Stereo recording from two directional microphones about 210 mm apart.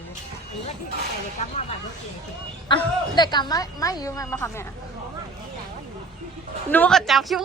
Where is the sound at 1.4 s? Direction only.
30° left (ahead or behind).